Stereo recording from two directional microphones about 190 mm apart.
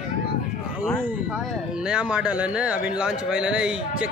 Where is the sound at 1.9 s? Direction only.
5° right (ahead or behind).